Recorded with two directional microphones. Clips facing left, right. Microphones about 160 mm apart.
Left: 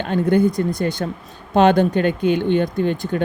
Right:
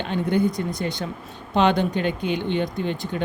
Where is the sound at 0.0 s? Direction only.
45° left (ahead or behind).